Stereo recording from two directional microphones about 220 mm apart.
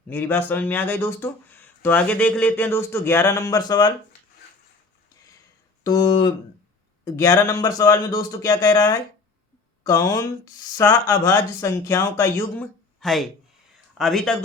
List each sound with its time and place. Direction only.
0.1 s speech: 10° left (ahead or behind)
5.8 s speech: 20° left (ahead or behind)
13.0 s speech: centre (ahead or behind)